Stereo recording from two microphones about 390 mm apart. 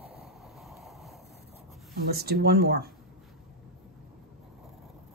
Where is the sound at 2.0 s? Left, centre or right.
Right.